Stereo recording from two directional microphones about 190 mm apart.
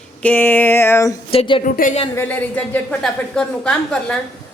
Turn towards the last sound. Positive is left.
turn(degrees=5)  # may be behind; listen again after turning